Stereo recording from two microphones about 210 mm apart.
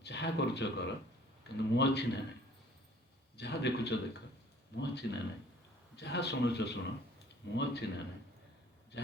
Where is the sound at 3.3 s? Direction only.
55° left (ahead or behind).